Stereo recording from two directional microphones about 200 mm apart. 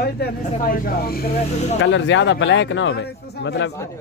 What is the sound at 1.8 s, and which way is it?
A man's voice, 65° left (ahead or behind).